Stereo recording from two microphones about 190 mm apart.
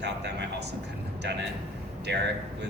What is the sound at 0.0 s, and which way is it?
Vehicle, 65° right (ahead or behind).